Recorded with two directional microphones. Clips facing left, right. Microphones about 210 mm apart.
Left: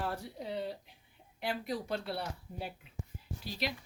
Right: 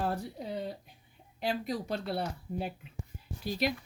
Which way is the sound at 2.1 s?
50° right (ahead or behind).